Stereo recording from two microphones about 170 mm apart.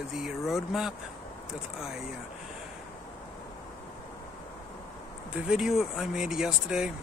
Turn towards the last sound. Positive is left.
turn(degrees=-5)  # may be behind; listen again after turning